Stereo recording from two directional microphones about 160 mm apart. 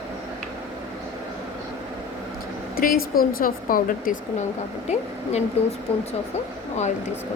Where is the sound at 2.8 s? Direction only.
65° left (ahead or behind).